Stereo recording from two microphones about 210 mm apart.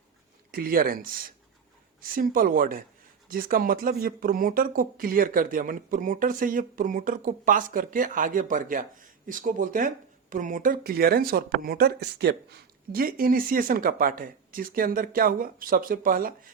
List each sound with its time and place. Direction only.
0.5 s speech: 45° right (ahead or behind)